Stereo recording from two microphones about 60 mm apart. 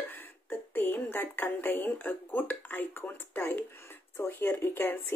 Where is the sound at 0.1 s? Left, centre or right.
Left.